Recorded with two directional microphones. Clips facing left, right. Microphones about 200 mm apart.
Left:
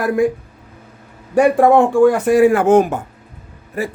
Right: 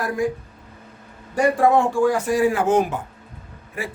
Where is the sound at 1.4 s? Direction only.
60° left (ahead or behind).